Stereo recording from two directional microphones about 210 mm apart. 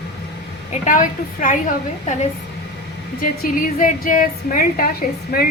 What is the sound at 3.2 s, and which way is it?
A woman's voice, 40° left (ahead or behind).